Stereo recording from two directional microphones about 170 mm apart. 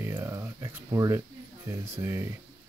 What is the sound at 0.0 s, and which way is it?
Speech, 15° right (ahead or behind).